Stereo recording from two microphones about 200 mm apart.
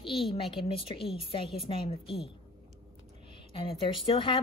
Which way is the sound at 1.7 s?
25° left (ahead or behind).